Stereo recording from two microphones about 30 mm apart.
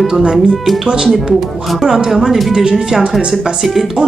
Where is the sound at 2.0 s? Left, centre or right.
Centre.